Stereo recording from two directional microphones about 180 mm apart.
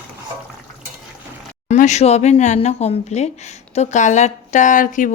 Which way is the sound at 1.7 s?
40° left (ahead or behind).